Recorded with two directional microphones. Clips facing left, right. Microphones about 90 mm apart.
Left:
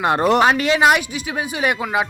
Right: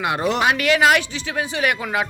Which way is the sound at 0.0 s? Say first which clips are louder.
Left 5 dB; 45° left (ahead or behind).